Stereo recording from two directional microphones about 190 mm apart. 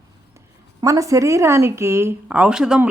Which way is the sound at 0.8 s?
15° right (ahead or behind).